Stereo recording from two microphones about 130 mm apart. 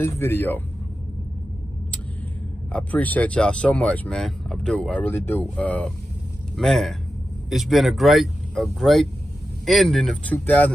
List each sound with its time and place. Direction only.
0.0 s a man's voice: 20° left (ahead or behind)
2.7 s speech: 10° left (ahead or behind)
5.0 s speech: 15° left (ahead or behind)
10.3 s speech: 10° left (ahead or behind)